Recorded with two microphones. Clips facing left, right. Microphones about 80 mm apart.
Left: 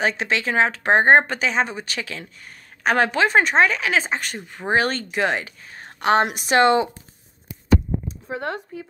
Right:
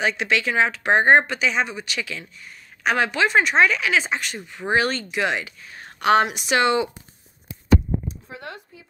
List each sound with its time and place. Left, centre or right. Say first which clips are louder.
0.0 s speech: even; left
6.2 s speech: left 3 dB; left
8.3 s speech: left 9 dB; left